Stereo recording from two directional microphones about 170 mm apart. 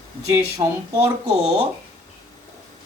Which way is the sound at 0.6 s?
20° right (ahead or behind).